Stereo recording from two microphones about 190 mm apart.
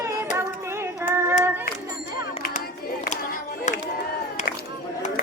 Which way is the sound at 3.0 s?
45° left (ahead or behind).